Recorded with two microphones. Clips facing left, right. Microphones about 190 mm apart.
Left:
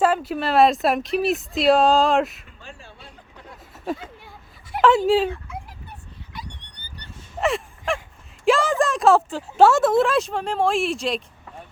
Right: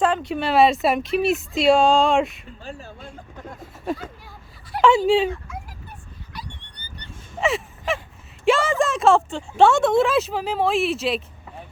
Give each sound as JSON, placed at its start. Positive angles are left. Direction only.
{"t": 0.0, "sound": "speech", "side_deg": 5}
{"t": 2.6, "sound": "a sound", "side_deg": -40}
{"t": 3.9, "sound": "speech", "side_deg": 0}
{"t": 7.3, "sound": "gasp", "side_deg": 0}
{"t": 8.4, "sound": "speech", "side_deg": 0}